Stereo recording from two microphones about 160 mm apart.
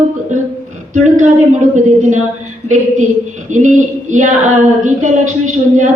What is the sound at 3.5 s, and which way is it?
Speech, 50° right (ahead or behind).